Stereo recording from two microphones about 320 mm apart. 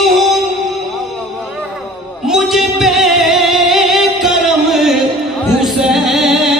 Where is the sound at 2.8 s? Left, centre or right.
Centre.